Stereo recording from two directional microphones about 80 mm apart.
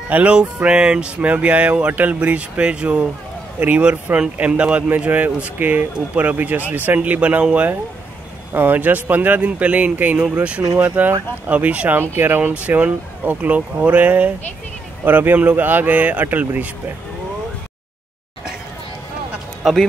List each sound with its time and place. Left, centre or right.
0.1 s speech: centre
19.6 s speech: centre